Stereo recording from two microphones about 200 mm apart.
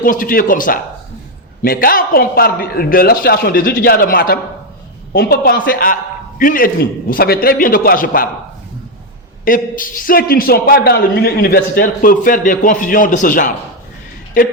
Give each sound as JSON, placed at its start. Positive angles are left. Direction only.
{"t": 0.0, "sound": "a man's voice", "side_deg": 45}
{"t": 9.4, "sound": "a man's voice", "side_deg": 45}